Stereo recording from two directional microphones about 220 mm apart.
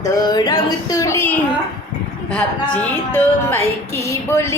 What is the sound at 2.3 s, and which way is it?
Speech, 5° left (ahead or behind).